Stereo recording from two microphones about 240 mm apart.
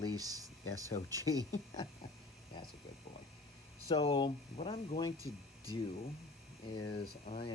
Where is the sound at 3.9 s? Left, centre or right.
Left.